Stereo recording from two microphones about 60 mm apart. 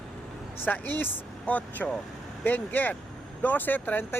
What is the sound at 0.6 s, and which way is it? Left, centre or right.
Speech, left.